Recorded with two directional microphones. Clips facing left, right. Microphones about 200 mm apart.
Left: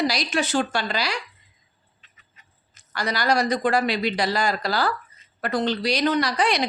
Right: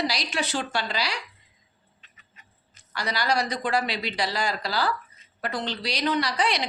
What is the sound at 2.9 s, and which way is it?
A woman's voice, 50° left (ahead or behind).